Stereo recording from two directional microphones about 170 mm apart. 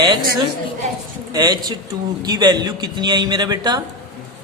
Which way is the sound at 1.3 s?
25° right (ahead or behind).